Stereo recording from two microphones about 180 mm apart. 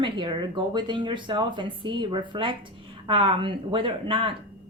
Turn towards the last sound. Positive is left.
turn(degrees=-30)  # may be behind; listen again after turning